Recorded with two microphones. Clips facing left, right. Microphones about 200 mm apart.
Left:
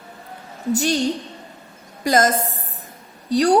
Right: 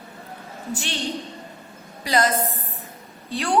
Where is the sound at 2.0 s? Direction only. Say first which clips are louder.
Left 4 dB; 45° left (ahead or behind).